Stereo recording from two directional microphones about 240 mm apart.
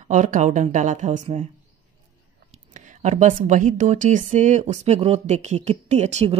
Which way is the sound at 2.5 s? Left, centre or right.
Right.